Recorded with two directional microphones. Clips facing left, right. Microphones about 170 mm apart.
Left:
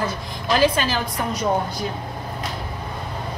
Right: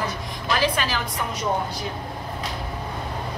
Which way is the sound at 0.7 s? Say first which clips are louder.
Left 3 dB; 30° left (ahead or behind).